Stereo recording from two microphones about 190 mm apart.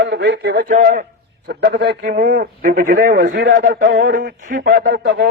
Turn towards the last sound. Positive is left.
turn(degrees=-65)  # may be behind; listen again after turning